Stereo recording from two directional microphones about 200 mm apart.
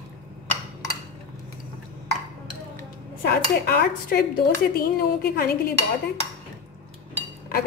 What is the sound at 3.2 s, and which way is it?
Speech, 50° left (ahead or behind).